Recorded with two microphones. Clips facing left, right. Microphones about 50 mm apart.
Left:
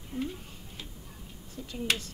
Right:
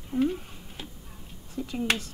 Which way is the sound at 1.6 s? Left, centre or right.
Right.